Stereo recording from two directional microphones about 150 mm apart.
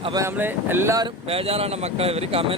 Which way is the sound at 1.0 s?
40° right (ahead or behind).